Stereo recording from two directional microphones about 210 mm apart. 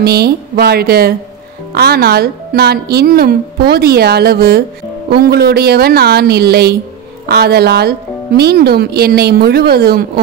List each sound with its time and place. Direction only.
0.0 s speech: 50° right (ahead or behind)